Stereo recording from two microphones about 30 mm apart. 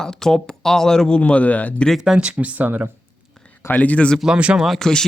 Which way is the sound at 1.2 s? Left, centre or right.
Left.